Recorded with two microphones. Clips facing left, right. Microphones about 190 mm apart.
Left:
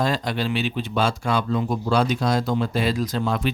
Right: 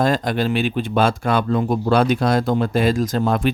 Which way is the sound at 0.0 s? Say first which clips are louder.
Right 5 dB; 50° right (ahead or behind).